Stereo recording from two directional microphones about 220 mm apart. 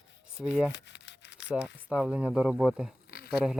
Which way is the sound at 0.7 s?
50° left (ahead or behind).